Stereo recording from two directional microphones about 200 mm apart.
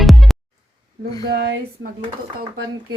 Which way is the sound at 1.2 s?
55° right (ahead or behind).